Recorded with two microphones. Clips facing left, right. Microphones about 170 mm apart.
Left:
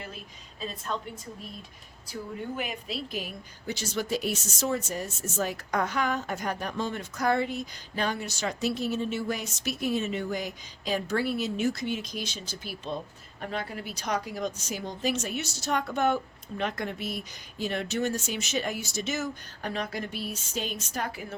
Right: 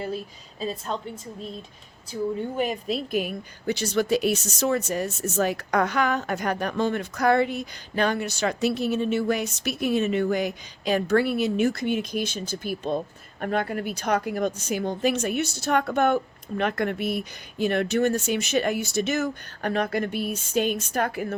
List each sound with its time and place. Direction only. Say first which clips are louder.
0.9 s a woman's voice: even; 35° right (ahead or behind)
2.6 s speech: right 8 dB; 40° right (ahead or behind); by 21.3 s 60° right (ahead or behind)